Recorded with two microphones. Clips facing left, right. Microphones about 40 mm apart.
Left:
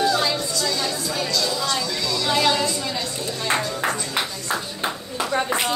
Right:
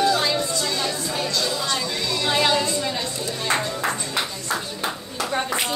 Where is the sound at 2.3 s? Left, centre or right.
Centre.